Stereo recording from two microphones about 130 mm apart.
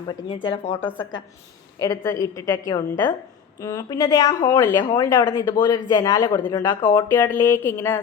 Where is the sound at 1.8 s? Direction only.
30° left (ahead or behind).